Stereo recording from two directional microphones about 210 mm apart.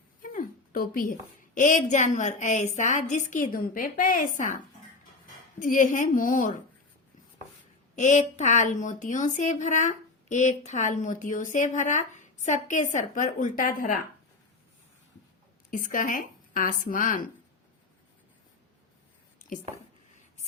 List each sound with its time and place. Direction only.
0.2 s a woman's voice: 40° left (ahead or behind)
5.5 s a woman's voice: 40° left (ahead or behind)
7.9 s a woman's voice: 35° left (ahead or behind)
15.7 s speech: 40° left (ahead or behind)